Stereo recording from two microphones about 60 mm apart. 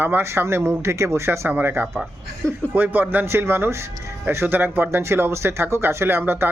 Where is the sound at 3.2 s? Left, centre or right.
Right.